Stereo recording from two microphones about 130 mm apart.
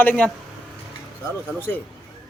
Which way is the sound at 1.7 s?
15° left (ahead or behind).